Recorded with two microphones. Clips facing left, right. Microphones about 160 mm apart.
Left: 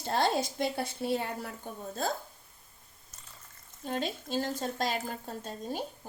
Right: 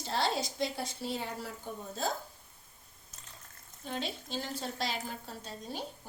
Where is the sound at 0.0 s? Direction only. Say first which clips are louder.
Left 4 dB; 50° left (ahead or behind).